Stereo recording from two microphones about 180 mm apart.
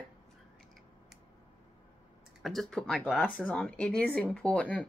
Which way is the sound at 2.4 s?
Centre (ahead or behind).